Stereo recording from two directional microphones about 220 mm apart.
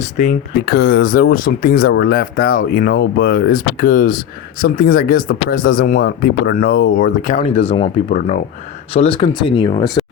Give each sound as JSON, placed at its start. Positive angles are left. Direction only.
{"t": 0.2, "sound": "speech", "side_deg": 30}
{"t": 0.6, "sound": "speech", "side_deg": 45}